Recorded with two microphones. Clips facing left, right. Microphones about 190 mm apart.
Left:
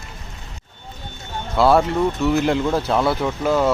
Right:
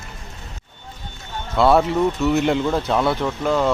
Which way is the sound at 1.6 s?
Centre (ahead or behind).